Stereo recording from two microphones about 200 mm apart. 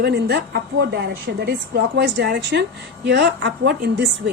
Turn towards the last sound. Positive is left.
turn(degrees=-55)  # may be behind; listen again after turning